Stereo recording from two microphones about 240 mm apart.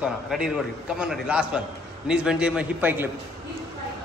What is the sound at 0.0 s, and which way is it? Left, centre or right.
A man's voice, centre.